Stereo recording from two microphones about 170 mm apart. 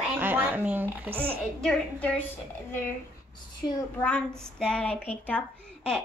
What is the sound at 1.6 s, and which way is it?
Speech, 5° left (ahead or behind).